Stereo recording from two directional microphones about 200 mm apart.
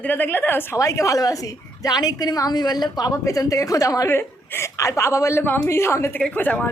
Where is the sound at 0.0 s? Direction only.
10° left (ahead or behind).